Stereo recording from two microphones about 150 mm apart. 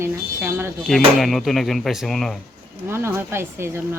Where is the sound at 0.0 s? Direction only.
15° right (ahead or behind).